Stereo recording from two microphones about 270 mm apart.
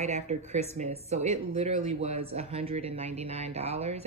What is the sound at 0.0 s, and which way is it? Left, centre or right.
Speech, right.